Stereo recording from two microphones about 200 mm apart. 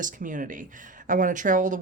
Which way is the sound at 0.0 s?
40° right (ahead or behind).